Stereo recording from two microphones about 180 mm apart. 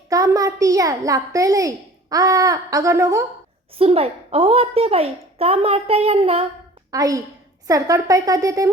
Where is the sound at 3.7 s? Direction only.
35° right (ahead or behind).